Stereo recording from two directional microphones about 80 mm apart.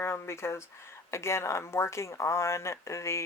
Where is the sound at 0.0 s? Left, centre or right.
Left.